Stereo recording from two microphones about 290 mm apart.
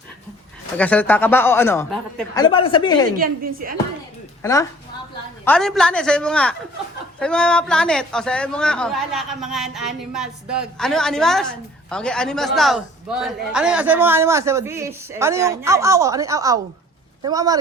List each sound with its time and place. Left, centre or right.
0.8 s speech: centre
2.4 s speech: centre
3.2 s a woman's voice: right
4.4 s a man's voice: centre